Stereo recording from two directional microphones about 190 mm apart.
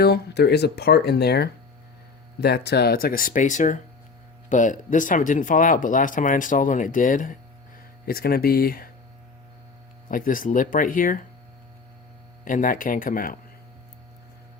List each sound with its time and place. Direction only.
0.0 s speech: 60° left (ahead or behind)
10.1 s speech: 45° left (ahead or behind)
12.5 s speech: 45° left (ahead or behind)